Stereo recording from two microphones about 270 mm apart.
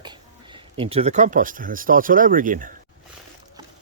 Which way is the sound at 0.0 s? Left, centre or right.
Centre.